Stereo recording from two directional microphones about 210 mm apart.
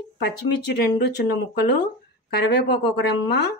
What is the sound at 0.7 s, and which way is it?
Speech, 50° left (ahead or behind).